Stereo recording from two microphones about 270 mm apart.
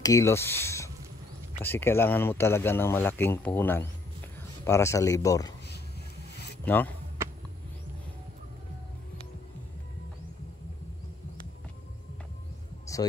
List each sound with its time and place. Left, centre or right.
0.0 s speech: centre
6.6 s speech: centre